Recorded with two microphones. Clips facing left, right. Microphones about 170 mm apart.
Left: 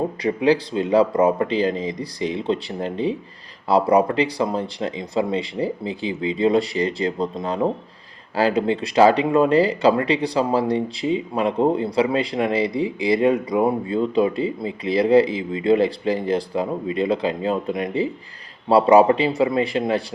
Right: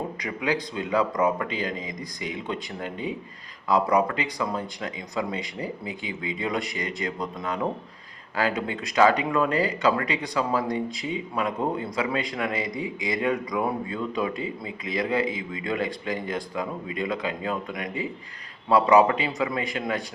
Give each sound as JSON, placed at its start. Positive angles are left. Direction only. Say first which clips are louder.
{"t": 0.2, "sound": "speech", "louder": "left 11 dB", "side_deg": 30}